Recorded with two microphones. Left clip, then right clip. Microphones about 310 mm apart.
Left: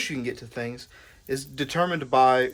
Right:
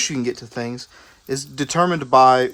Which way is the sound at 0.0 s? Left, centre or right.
Right.